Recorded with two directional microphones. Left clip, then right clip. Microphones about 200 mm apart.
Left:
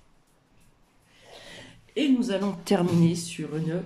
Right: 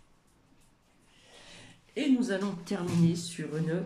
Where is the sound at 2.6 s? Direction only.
20° left (ahead or behind).